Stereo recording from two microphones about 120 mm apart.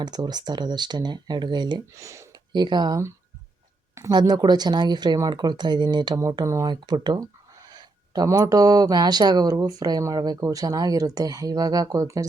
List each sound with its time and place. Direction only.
0.0 s speech: 35° right (ahead or behind)
2.0 s speech: 25° right (ahead or behind)
2.5 s speech: 40° right (ahead or behind)
4.1 s speech: 35° right (ahead or behind)
6.1 s speech: 25° right (ahead or behind)